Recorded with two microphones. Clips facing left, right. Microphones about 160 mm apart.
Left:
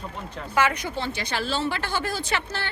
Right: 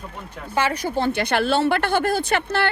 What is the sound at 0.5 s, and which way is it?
A woman's voice, 35° right (ahead or behind).